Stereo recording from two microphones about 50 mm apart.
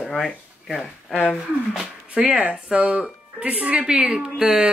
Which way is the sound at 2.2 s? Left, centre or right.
Right.